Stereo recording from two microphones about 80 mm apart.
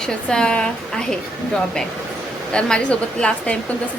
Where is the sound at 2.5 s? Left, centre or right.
Centre.